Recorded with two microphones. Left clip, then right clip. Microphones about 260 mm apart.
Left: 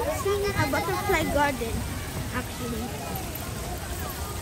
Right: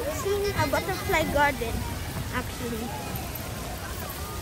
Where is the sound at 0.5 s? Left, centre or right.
Right.